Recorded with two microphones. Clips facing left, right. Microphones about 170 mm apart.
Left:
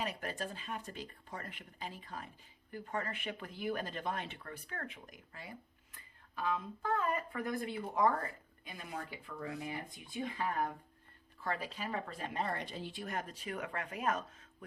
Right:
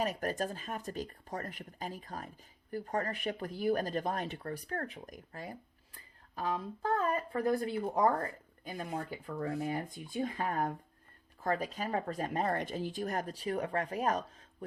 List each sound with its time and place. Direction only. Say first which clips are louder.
0.0 s speech: right 6 dB; 45° right (ahead or behind)